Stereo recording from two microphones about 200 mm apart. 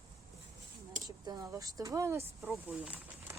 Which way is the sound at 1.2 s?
15° right (ahead or behind).